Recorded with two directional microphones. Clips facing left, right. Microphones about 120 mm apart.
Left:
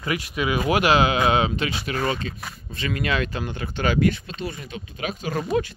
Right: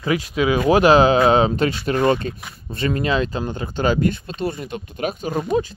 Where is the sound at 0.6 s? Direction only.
35° right (ahead or behind).